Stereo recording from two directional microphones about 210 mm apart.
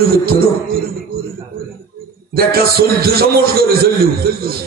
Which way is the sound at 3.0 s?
45° right (ahead or behind).